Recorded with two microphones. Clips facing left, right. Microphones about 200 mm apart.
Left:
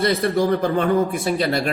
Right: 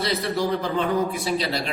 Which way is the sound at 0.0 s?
50° left (ahead or behind).